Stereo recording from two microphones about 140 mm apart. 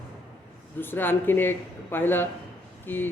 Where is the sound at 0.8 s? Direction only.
15° left (ahead or behind).